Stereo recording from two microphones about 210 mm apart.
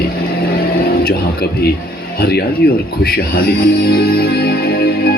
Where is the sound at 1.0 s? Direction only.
45° left (ahead or behind).